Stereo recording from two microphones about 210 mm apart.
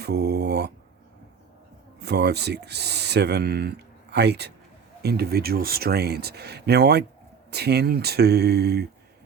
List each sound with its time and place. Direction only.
0.0 s speech: 50° right (ahead or behind)
2.0 s speech: 50° right (ahead or behind)